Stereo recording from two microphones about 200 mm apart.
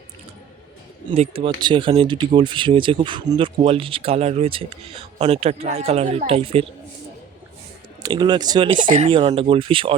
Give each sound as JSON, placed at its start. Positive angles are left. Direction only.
{"t": 1.1, "sound": "speech", "side_deg": -30}
{"t": 8.0, "sound": "speech", "side_deg": -20}
{"t": 8.8, "sound": "speech", "side_deg": -40}
{"t": 9.0, "sound": "speech", "side_deg": -30}